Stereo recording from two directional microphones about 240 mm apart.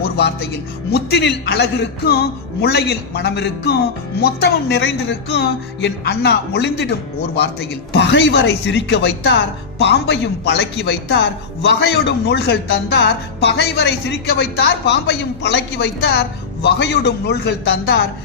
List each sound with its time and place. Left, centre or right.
0.0 s a man's voice: left